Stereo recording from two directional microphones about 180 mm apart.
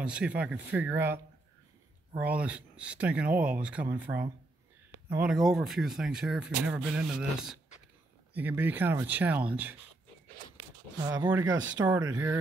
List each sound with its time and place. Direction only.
0.0 s speech: 5° right (ahead or behind)
11.1 s speech: 20° right (ahead or behind)